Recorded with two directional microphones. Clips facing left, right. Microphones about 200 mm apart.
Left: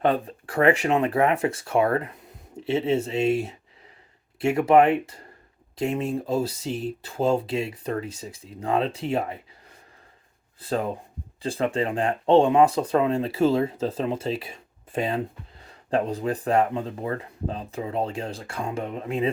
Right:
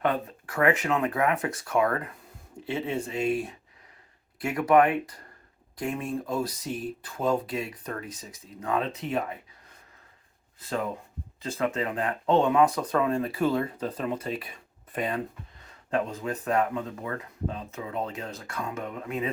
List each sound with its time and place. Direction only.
0.0 s speech: 30° left (ahead or behind)
10.6 s speech: 35° left (ahead or behind)